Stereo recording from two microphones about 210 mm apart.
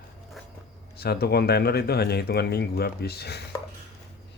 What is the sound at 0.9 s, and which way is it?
Speech, 50° left (ahead or behind).